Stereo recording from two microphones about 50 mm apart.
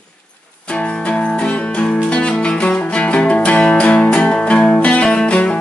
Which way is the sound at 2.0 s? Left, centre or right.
Left.